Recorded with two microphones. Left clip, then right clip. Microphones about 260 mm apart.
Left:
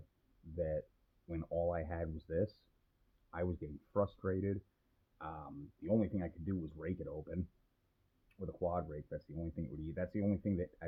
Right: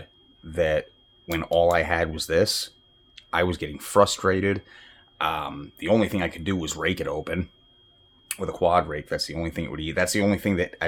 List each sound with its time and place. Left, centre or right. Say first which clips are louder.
0.5 s speech: right 16 dB; centre
1.5 s speech: right 17 dB; right
1.7 s speech: right 19 dB; centre
8.7 s speech: right 19 dB; right